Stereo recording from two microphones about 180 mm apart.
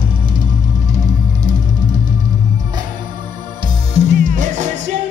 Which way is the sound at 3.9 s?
45° right (ahead or behind).